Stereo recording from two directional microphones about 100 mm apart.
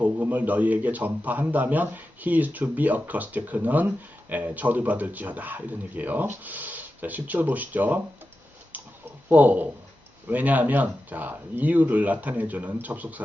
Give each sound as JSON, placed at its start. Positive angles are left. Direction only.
{"t": 0.0, "sound": "a man's voice", "side_deg": -15}
{"t": 8.7, "sound": "clicking", "side_deg": -15}
{"t": 9.3, "sound": "a man's voice", "side_deg": -15}